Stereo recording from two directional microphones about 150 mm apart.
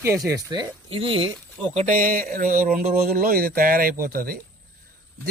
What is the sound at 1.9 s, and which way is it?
Speech, 65° right (ahead or behind).